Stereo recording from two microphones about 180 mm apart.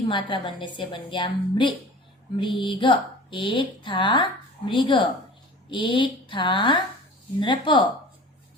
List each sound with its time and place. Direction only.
0.1 s speech: 25° left (ahead or behind)